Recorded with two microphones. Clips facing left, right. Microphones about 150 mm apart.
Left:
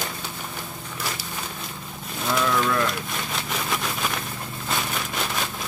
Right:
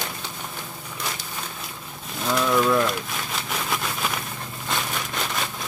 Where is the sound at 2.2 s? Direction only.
Centre (ahead or behind).